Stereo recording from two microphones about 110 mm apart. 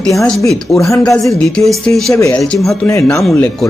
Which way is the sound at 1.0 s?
5° left (ahead or behind).